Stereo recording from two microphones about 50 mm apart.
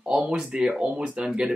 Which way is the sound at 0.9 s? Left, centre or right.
Right.